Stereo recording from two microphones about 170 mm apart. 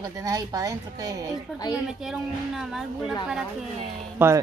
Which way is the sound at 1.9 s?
5° right (ahead or behind).